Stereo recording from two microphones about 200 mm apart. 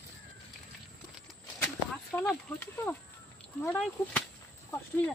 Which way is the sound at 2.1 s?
10° left (ahead or behind).